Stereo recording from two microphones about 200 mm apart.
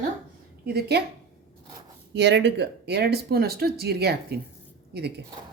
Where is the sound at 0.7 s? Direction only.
55° right (ahead or behind).